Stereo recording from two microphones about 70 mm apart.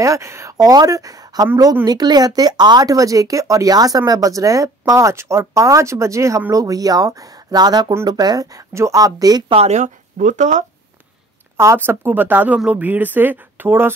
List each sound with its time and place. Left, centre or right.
0.0 s speech: right
0.6 s speech: right
1.9 s speech: right
8.7 s speech: right
11.5 s speech: right